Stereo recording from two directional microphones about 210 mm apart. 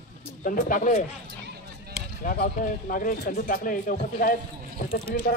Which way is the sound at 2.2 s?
40° left (ahead or behind).